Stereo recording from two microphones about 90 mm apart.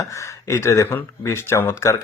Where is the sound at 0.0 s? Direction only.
35° left (ahead or behind).